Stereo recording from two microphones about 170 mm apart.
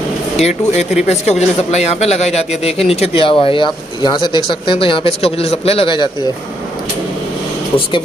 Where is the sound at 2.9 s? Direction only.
35° left (ahead or behind).